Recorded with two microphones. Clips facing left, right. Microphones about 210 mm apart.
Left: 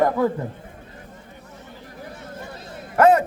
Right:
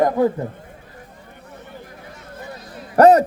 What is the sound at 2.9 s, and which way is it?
Speech, 40° right (ahead or behind).